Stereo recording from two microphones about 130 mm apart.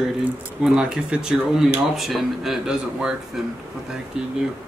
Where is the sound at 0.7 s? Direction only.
5° right (ahead or behind).